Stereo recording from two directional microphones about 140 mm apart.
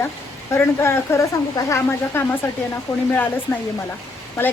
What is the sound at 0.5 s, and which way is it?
Speech, 20° left (ahead or behind).